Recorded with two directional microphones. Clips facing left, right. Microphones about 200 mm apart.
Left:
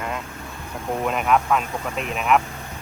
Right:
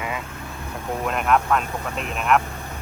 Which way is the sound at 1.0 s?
Centre (ahead or behind).